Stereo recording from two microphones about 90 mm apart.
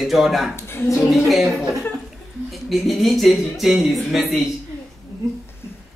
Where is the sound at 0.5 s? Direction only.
25° left (ahead or behind).